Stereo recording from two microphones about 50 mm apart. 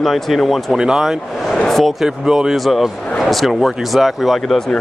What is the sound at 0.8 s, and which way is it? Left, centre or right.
Speech, centre.